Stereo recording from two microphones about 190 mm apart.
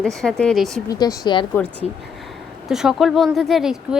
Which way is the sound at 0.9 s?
20° left (ahead or behind).